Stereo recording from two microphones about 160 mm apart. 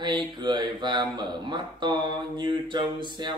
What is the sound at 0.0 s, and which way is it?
Speech, 30° right (ahead or behind).